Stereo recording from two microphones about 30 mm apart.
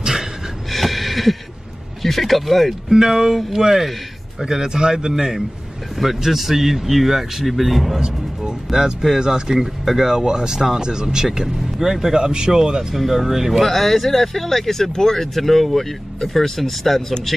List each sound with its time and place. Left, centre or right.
0.0 s a sound: centre
0.7 s a sound: centre
2.0 s speech: centre
2.9 s speech: centre
8.7 s speech: right
11.2 s speech: centre
12.2 s speech: right
12.9 s speech: centre
13.6 s speech: centre